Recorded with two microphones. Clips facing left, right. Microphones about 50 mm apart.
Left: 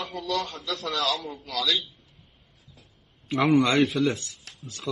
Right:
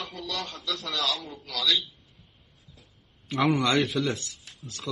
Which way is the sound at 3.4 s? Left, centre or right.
Centre.